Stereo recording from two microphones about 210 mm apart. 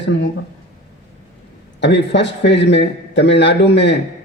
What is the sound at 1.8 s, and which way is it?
A man's voice, 55° left (ahead or behind).